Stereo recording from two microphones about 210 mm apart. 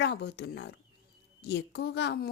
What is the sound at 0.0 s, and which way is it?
A woman's voice, 50° left (ahead or behind).